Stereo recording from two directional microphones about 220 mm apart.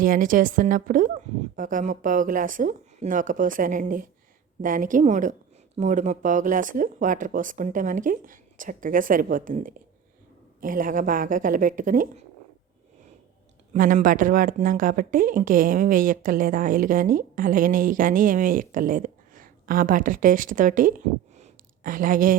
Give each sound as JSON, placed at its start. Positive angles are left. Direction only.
{"t": 0.0, "sound": "speech", "side_deg": -40}
{"t": 13.7, "sound": "speech", "side_deg": -35}
{"t": 21.3, "sound": "a sound", "side_deg": -35}